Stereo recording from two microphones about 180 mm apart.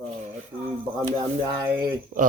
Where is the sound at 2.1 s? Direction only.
60° right (ahead or behind).